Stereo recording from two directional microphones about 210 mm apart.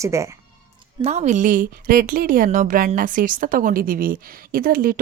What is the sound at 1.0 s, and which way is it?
A woman's voice, 30° right (ahead or behind).